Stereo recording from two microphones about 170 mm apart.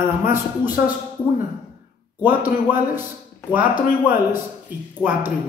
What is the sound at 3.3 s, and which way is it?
Speech, 10° right (ahead or behind).